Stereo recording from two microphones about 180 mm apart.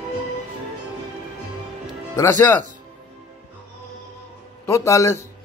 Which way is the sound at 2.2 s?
15° left (ahead or behind).